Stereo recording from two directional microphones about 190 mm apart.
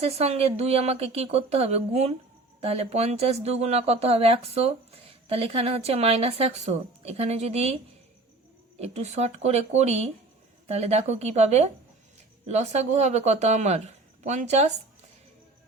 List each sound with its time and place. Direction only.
0.0 s speech: 30° right (ahead or behind)
8.8 s speech: 35° right (ahead or behind)